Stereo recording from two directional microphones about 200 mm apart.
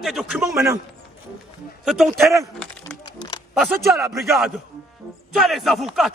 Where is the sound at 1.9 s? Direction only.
Centre (ahead or behind).